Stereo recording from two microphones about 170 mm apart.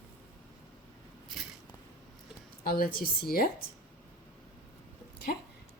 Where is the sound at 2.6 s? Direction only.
60° left (ahead or behind).